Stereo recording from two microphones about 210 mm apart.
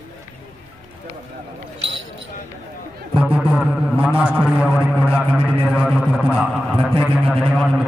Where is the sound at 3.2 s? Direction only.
5° right (ahead or behind).